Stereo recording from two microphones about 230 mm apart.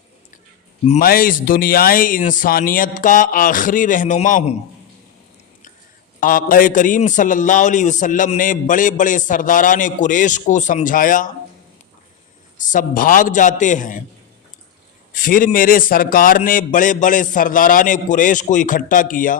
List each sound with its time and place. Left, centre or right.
0.9 s a man's voice: left
6.1 s a man's voice: left
12.5 s a man's voice: left
15.1 s a man's voice: left